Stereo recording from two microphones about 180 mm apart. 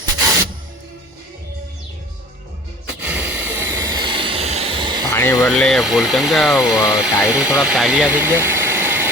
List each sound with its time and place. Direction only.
3.0 s a sound: 10° right (ahead or behind); by 4.9 s 30° right (ahead or behind)
5.1 s speech: 15° left (ahead or behind)
5.5 s speech: centre (ahead or behind)